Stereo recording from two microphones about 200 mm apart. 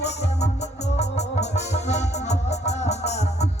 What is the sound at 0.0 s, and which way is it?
Music, 35° left (ahead or behind).